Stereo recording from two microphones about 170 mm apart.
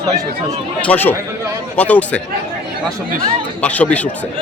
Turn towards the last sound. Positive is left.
turn(degrees=10)  # may be behind; listen again after turning